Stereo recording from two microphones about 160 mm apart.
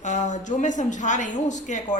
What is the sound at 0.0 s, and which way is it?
Speech, 50° left (ahead or behind).